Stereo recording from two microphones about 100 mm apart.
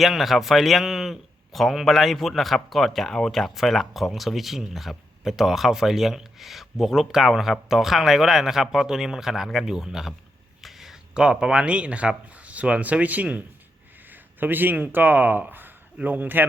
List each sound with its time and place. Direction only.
0.0 s a man's voice: centre (ahead or behind); by 16.5 s 20° right (ahead or behind)